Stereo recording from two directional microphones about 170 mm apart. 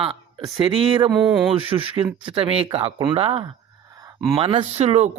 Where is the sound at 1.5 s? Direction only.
30° right (ahead or behind).